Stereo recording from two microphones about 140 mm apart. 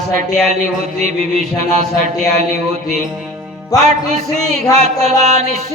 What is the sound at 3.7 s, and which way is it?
Music, 25° left (ahead or behind).